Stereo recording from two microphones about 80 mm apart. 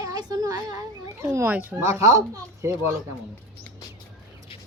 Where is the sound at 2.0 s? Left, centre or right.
Right.